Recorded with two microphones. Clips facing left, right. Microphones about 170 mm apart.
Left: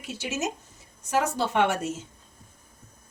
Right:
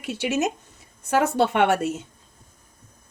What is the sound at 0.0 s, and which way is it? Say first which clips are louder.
A woman's voice: right 7 dB; 65° right (ahead or behind).